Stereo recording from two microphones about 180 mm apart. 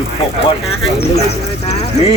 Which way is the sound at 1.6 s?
35° left (ahead or behind).